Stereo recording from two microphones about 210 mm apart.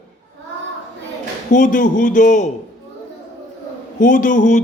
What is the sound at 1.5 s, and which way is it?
Speech, 40° left (ahead or behind).